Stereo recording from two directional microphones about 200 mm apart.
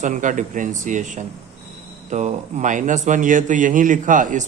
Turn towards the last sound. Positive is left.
turn(degrees=-40)  # may be behind; listen again after turning